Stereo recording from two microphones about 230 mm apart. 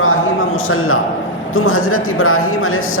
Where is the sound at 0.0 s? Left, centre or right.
Left.